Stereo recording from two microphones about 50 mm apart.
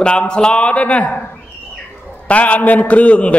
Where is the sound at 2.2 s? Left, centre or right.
Left.